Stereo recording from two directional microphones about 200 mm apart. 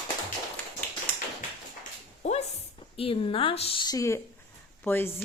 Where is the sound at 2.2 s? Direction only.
30° left (ahead or behind).